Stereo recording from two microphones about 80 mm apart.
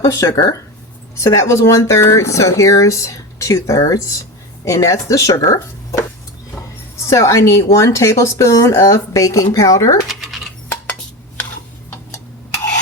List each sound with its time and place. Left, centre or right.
0.0 s speech: left
7.1 s speech: left
10.1 s a sound: centre